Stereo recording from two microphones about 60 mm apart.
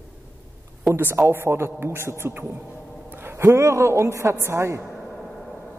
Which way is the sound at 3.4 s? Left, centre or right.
Right.